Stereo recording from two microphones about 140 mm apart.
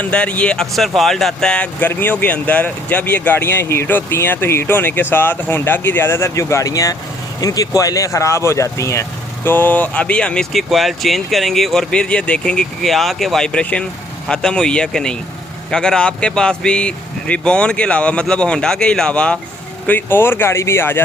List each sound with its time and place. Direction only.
0.0 s speech: 10° left (ahead or behind)